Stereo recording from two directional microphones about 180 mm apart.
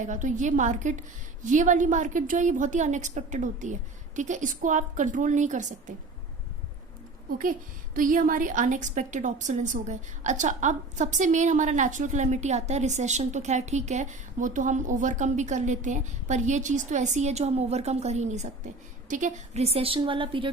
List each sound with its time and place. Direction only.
0.0 s a woman's voice: 45° right (ahead or behind)
7.9 s a woman's voice: 50° right (ahead or behind); by 20.5 s 30° right (ahead or behind)